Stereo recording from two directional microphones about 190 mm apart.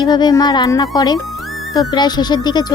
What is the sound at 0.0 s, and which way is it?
Speech, 20° left (ahead or behind).